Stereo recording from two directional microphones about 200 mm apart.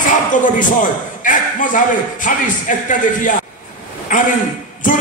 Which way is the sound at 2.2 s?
40° left (ahead or behind).